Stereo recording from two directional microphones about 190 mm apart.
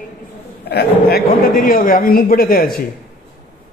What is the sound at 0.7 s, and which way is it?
A man's voice, 55° left (ahead or behind).